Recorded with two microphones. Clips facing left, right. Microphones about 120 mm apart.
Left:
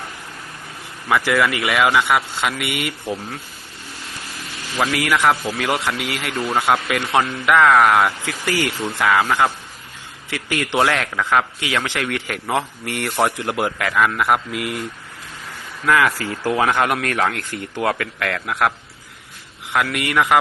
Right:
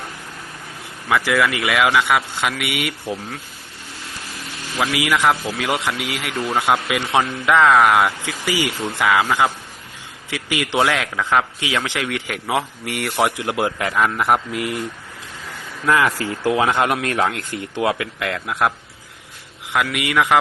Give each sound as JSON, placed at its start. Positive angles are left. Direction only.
{"t": 1.0, "sound": "speech", "side_deg": 15}
{"t": 1.7, "sound": "speech", "side_deg": 0}
{"t": 2.6, "sound": "a man's voice", "side_deg": -10}
{"t": 4.8, "sound": "a man's voice", "side_deg": -10}
{"t": 10.2, "sound": "a sound", "side_deg": -10}
{"t": 10.8, "sound": "a man's voice", "side_deg": -5}
{"t": 13.7, "sound": "speech", "side_deg": -25}
{"t": 14.5, "sound": "speech", "side_deg": -35}
{"t": 15.9, "sound": "a man's voice", "side_deg": -25}